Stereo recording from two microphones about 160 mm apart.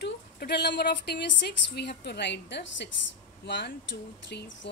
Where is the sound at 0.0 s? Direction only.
90° left.